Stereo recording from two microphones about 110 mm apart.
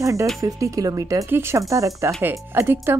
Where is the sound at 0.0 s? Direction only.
30° right (ahead or behind).